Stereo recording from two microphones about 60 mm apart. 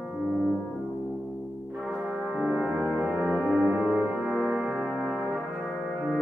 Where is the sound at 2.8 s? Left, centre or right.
Centre.